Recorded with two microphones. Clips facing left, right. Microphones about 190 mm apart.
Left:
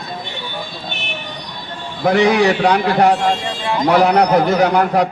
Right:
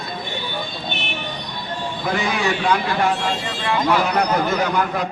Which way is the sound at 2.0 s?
85° left.